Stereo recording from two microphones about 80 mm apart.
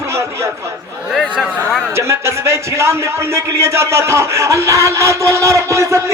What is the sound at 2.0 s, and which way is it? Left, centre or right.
A man's voice, right.